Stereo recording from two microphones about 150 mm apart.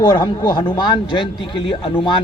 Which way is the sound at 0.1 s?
30° left (ahead or behind).